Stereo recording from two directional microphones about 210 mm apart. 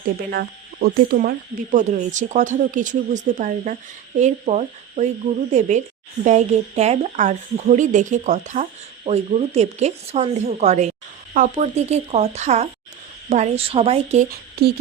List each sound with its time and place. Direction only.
0.3 s a woman's voice: 45° right (ahead or behind); by 14.3 s 30° right (ahead or behind)
14.3 s speech: 50° right (ahead or behind)